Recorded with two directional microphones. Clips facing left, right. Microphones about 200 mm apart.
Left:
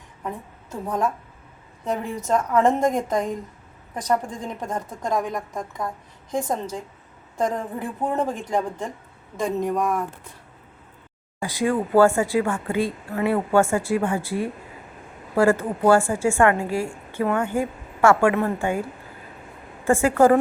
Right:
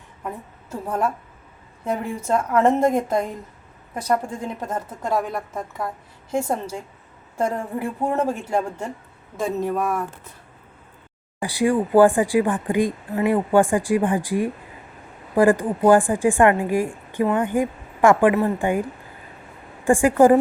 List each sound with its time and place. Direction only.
0.2 s a sound: 5° right (ahead or behind)
1.8 s speech: 10° right (ahead or behind)
11.3 s speech: 15° right (ahead or behind)